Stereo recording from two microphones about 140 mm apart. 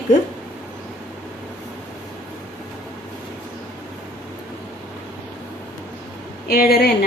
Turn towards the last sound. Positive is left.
turn(degrees=90)